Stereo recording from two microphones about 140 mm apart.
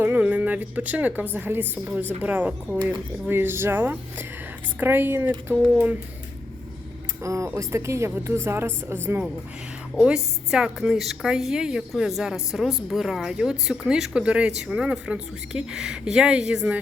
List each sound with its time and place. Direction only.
0.0 s a woman's voice: 10° right (ahead or behind)
7.2 s a woman's voice: 20° right (ahead or behind)
9.9 s speech: 5° right (ahead or behind)